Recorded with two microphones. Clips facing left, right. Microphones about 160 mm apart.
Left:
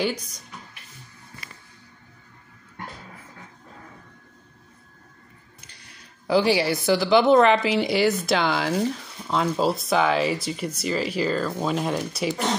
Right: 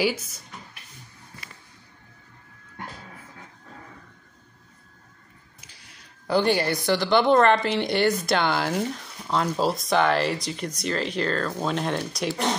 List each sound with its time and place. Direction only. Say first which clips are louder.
0.0 s a woman's voice: right 1 dB; 5° right (ahead or behind)
5.6 s a woman's voice: left 1 dB; 5° right (ahead or behind)